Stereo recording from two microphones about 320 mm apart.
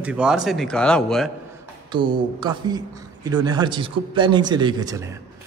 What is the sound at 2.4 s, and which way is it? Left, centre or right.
A man's voice, centre.